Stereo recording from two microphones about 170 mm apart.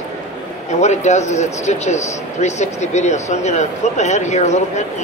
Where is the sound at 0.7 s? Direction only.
40° left (ahead or behind).